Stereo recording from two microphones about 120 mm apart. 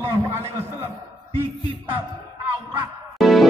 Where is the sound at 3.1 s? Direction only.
Centre (ahead or behind).